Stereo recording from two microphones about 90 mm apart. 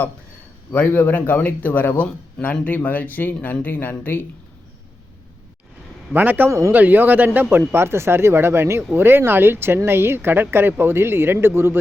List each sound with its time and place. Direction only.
0.7 s a man's voice: 20° left (ahead or behind)
6.1 s speech: 20° right (ahead or behind)